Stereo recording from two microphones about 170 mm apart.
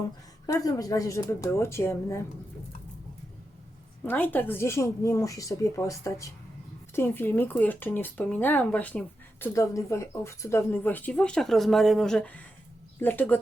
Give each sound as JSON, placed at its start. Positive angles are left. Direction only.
{"t": 0.4, "sound": "speech", "side_deg": 20}
{"t": 4.0, "sound": "speech", "side_deg": 10}